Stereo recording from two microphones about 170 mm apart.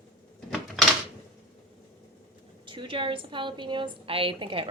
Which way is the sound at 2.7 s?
30° right (ahead or behind).